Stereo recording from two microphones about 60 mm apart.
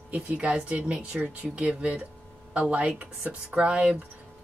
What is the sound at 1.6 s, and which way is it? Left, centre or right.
Speech, centre.